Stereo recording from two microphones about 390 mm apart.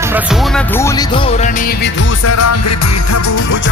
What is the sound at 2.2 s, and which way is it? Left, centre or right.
Music, left.